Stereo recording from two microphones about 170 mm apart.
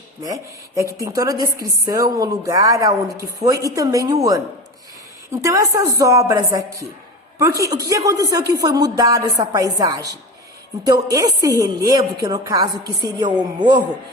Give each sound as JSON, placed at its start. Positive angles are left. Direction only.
{"t": 0.2, "sound": "a woman's voice", "side_deg": -20}